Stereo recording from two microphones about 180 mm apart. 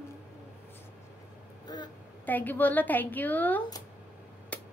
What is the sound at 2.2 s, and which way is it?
A woman's voice, 10° left (ahead or behind).